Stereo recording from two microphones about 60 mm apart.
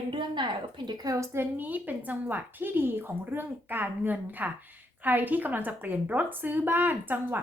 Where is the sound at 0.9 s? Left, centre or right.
Right.